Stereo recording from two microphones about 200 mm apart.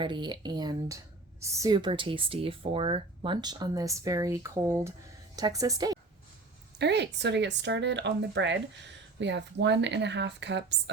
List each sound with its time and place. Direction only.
0.0 s speech: 25° right (ahead or behind)
6.7 s speech: 60° right (ahead or behind)